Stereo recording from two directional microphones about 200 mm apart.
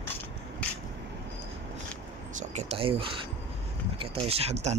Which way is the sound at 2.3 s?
35° right (ahead or behind).